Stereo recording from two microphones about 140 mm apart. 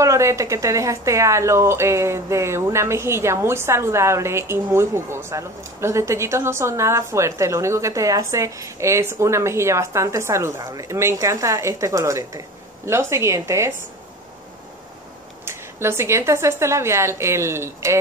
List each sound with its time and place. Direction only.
0.0 s a woman's voice: 20° right (ahead or behind)
15.4 s a woman's voice: 20° right (ahead or behind)